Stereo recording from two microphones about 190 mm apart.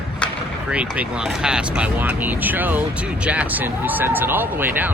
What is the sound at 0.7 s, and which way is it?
Speech, 5° right (ahead or behind).